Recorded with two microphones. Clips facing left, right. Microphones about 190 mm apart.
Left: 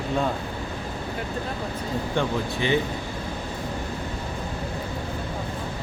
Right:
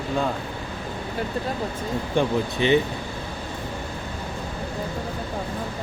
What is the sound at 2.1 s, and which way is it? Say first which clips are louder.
Speech: right 5 dB; 20° right (ahead or behind).